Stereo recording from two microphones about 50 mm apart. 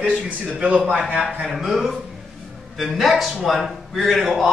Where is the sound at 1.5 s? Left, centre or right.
Centre.